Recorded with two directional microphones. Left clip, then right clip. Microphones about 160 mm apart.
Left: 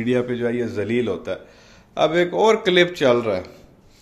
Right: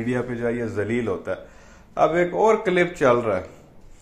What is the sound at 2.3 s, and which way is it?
Speech, 30° left (ahead or behind).